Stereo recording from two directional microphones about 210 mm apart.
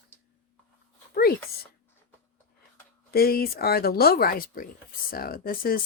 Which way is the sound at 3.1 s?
45° left (ahead or behind).